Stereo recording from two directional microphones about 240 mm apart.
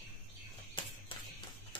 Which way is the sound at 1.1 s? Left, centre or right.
Left.